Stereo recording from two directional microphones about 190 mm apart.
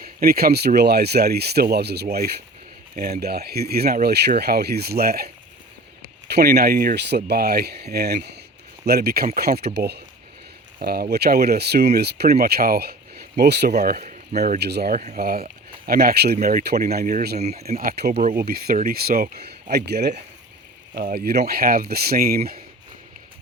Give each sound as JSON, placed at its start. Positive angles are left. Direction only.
{"t": 0.0, "sound": "speech", "side_deg": -50}
{"t": 17.4, "sound": "speech", "side_deg": -35}
{"t": 17.7, "sound": "speech", "side_deg": -55}
{"t": 18.1, "sound": "speech", "side_deg": -40}
{"t": 18.3, "sound": "speech", "side_deg": -55}